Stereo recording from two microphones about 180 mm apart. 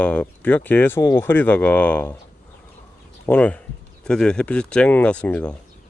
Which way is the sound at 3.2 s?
10° left (ahead or behind).